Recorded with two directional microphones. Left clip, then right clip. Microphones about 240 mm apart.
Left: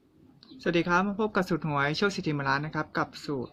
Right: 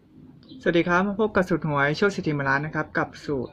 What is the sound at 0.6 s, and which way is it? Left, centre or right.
Speech, centre.